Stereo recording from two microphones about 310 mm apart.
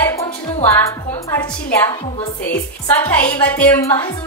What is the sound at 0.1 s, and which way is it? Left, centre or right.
Music, centre.